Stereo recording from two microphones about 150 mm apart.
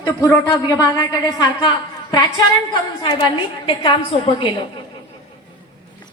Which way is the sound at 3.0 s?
30° left (ahead or behind).